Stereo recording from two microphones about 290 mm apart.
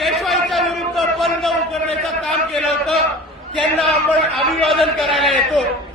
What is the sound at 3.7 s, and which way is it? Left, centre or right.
A man's voice, centre.